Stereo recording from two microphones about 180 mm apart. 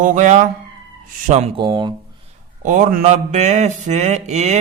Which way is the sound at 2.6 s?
45° right (ahead or behind).